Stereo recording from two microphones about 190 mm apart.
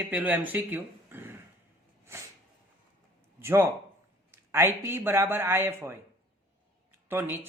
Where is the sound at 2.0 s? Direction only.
15° right (ahead or behind).